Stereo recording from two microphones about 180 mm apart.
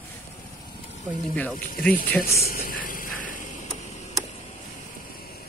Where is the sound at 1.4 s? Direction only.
10° left (ahead or behind).